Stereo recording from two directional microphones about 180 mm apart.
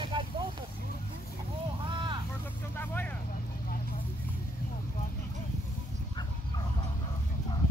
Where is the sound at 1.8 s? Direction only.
25° right (ahead or behind).